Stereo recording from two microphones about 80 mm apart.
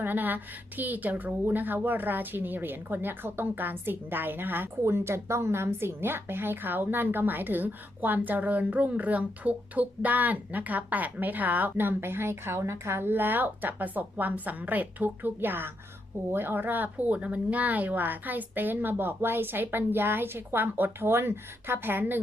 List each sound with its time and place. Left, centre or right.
0.0 s speech: right